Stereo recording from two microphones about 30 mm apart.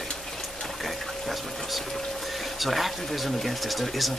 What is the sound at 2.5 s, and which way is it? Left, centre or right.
Speech, centre.